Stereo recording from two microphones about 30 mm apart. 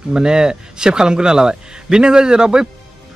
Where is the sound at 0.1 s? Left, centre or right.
Right.